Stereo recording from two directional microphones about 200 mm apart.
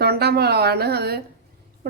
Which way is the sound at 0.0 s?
55° right (ahead or behind).